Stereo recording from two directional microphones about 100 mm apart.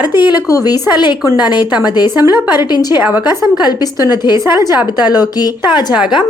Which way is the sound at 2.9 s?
15° right (ahead or behind).